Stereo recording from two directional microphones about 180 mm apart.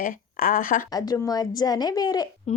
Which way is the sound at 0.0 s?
50° left (ahead or behind).